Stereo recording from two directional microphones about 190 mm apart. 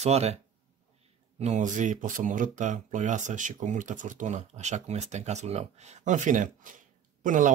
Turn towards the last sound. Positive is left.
turn(degrees=-45)  # may be behind; listen again after turning